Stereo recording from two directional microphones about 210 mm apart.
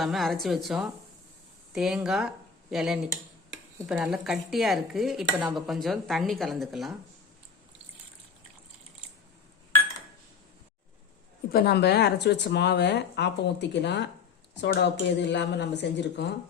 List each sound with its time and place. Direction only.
0.0 s dishes: centre (ahead or behind)
1.7 s speech: centre (ahead or behind)
3.8 s dishes: 5° right (ahead or behind)
11.5 s speech: 50° left (ahead or behind)